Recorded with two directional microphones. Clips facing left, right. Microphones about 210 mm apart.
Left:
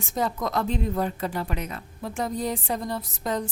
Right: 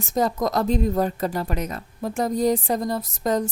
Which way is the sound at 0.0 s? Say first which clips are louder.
Right 5 dB; 40° right (ahead or behind).